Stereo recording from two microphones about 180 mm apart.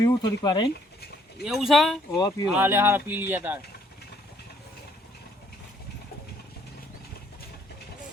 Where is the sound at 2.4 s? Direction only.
10° right (ahead or behind).